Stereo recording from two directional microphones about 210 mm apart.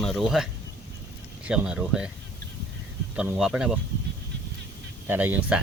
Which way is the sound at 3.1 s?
5° right (ahead or behind).